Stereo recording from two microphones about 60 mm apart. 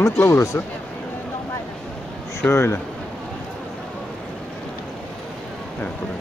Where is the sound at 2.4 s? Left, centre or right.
Left.